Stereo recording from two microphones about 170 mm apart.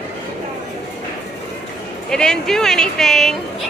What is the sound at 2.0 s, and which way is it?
Speech, 5° left (ahead or behind).